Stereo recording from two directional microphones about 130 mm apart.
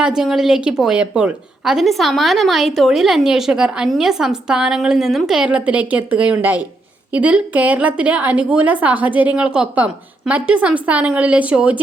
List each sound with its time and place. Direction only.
0.0 s a woman's voice: 5° right (ahead or behind)